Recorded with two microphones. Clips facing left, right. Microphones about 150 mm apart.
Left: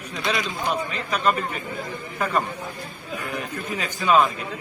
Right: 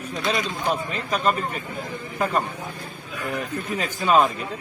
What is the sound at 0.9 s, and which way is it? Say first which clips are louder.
Speech: even; 40° right (ahead or behind).